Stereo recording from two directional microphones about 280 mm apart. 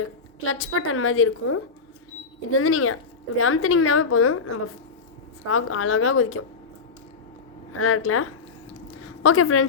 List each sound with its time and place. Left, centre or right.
0.0 s a woman's voice: left
7.8 s a woman's voice: left
9.0 s a sound: left